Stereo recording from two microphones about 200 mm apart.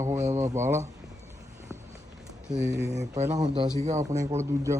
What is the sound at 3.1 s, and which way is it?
Speech, 35° right (ahead or behind).